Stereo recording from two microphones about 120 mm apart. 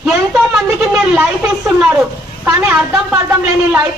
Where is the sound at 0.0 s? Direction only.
5° right (ahead or behind).